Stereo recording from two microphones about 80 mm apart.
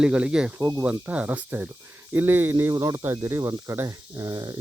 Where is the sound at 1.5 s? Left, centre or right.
Right.